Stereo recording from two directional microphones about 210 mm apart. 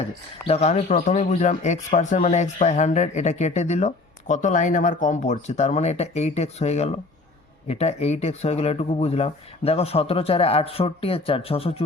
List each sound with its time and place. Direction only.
0.0 s speech: 30° left (ahead or behind)